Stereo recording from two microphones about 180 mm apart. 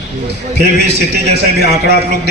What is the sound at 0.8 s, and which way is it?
A man's voice, 65° right (ahead or behind).